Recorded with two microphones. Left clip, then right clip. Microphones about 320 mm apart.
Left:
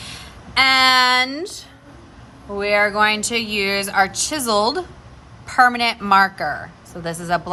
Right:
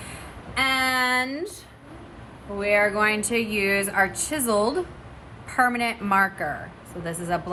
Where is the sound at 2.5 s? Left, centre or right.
Centre.